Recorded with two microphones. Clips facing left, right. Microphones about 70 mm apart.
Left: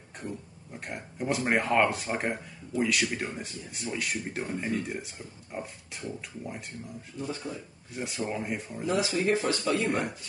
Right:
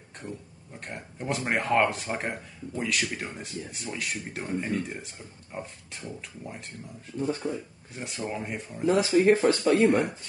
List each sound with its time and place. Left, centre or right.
0.7 s speech: centre
7.2 s speech: right
7.9 s speech: centre
8.8 s speech: right